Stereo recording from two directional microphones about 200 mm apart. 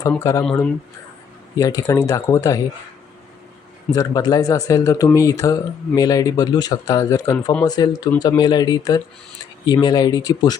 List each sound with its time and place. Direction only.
0.2 s speech: 15° left (ahead or behind)
1.5 s speech: 20° left (ahead or behind)
3.9 s speech: 20° left (ahead or behind)